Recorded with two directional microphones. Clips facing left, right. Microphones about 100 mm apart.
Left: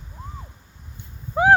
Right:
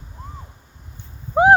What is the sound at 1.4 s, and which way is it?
Owl, 25° right (ahead or behind).